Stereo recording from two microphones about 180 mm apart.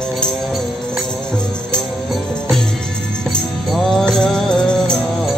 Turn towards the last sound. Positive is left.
turn(degrees=5)  # may be behind; listen again after turning